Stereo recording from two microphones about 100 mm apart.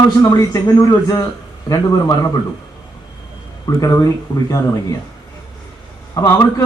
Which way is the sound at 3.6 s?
35° left (ahead or behind).